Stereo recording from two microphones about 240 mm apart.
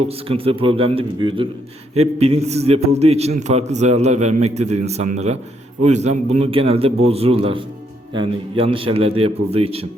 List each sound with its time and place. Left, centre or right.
0.3 s a man's voice: right